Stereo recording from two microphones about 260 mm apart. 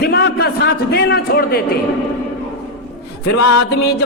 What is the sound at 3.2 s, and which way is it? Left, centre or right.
Music, left.